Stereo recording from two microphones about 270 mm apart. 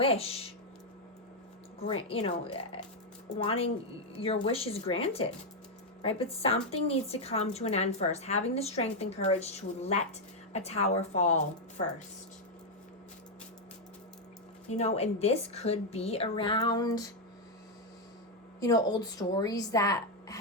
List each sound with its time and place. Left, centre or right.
0.0 s a woman's voice: left
2.0 s a woman's voice: left
14.7 s a woman's voice: left
18.6 s speech: centre